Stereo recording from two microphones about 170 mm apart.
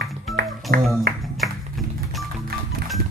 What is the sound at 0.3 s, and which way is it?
Music, centre (ahead or behind).